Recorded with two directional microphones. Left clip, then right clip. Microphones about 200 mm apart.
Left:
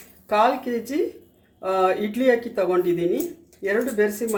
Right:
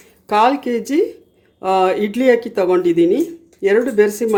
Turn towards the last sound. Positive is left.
turn(degrees=-55)  # may be behind; listen again after turning